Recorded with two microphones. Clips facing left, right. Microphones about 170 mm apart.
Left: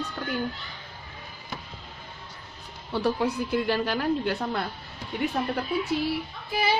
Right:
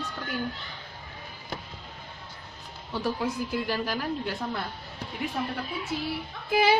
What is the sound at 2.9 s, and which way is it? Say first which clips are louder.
A woman's voice: left 4 dB; 65° left (ahead or behind).